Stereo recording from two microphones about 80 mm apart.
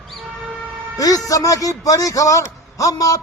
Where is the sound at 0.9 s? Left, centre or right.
Left.